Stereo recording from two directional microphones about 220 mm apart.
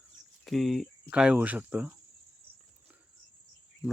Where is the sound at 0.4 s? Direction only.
Centre (ahead or behind).